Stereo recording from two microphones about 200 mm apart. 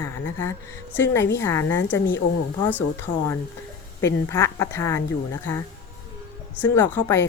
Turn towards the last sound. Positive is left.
turn(degrees=10)  # may be behind; listen again after turning